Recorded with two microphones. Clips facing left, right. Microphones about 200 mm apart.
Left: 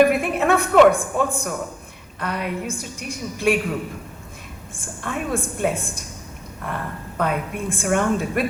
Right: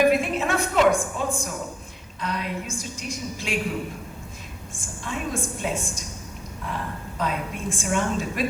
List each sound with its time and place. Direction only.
0.0 s a woman's voice: 60° left (ahead or behind)
4.8 s a woman's voice: 55° left (ahead or behind)
7.2 s a woman's voice: 55° left (ahead or behind)